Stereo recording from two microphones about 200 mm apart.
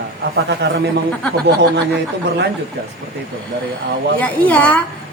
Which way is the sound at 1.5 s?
55° right (ahead or behind).